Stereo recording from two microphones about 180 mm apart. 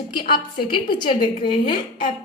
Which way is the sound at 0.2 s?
55° left (ahead or behind).